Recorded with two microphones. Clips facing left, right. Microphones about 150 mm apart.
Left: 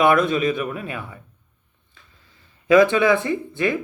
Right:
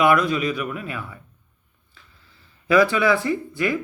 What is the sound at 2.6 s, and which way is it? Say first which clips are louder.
Speech: left 3 dB; 20° left (ahead or behind).